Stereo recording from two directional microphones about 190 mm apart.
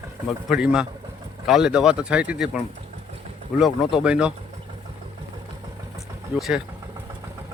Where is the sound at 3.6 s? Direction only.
5° right (ahead or behind).